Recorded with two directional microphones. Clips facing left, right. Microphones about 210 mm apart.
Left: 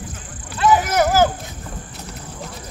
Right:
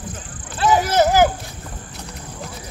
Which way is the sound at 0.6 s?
35° right (ahead or behind).